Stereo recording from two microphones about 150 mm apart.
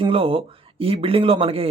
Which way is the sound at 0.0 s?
35° right (ahead or behind).